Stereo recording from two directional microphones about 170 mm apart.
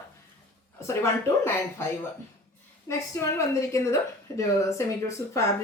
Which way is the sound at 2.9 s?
15° left (ahead or behind).